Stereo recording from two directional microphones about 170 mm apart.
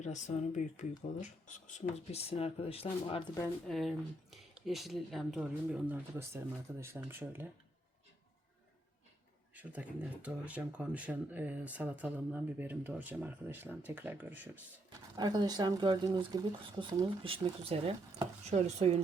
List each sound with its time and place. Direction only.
0.0 s speech: 45° left (ahead or behind)
2.3 s speech: 35° left (ahead or behind)
3.7 s speech: centre (ahead or behind)
9.6 s speech: 10° right (ahead or behind)
15.1 s speech: 25° right (ahead or behind)